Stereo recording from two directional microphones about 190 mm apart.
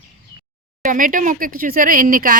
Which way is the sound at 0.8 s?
45° right (ahead or behind).